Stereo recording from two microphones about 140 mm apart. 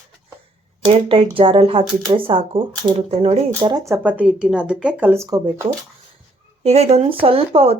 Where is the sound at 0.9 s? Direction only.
40° right (ahead or behind).